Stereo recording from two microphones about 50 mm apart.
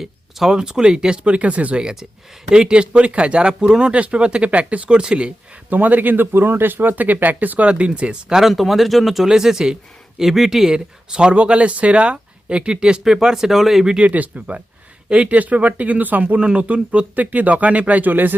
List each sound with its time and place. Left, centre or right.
0.0 s speech: centre; by 1.8 s right
1.8 s speech: centre
5.7 s speech: right
7.7 s speech: right
14.0 s speech: right
16.2 s speech: right